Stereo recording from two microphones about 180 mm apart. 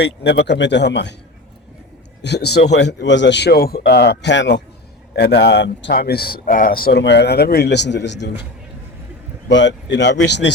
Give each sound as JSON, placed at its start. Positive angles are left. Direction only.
{"t": 0.0, "sound": "speech", "side_deg": 70}
{"t": 2.2, "sound": "speech", "side_deg": 65}
{"t": 5.1, "sound": "speech", "side_deg": 65}
{"t": 9.5, "sound": "speech", "side_deg": 85}